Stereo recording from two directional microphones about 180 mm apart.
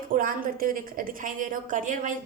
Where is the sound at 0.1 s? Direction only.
50° right (ahead or behind).